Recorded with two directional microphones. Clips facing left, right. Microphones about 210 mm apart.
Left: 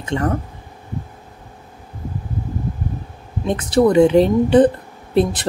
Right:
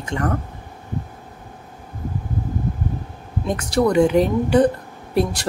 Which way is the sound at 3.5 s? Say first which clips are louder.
Left 4 dB; 25° left (ahead or behind).